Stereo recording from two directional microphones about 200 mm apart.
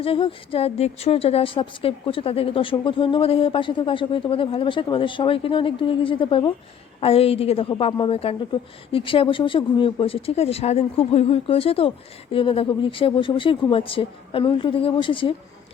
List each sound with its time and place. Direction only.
0.0 s a woman's voice: 25° left (ahead or behind)